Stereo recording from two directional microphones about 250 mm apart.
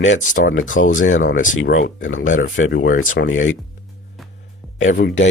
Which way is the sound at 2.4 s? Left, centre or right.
Left.